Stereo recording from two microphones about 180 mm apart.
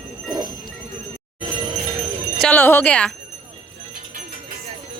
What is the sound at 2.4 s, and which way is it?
Speech, 10° left (ahead or behind).